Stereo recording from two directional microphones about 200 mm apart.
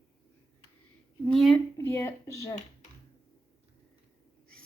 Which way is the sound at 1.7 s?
15° left (ahead or behind).